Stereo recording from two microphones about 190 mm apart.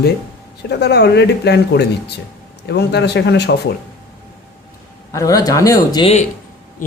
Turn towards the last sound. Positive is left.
turn(degrees=15)  # may be behind; listen again after turning